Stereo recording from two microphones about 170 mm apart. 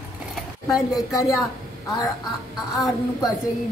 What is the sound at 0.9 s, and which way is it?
Speech, centre (ahead or behind).